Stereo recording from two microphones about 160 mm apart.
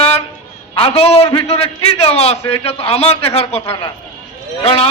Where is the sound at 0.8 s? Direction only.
35° left (ahead or behind).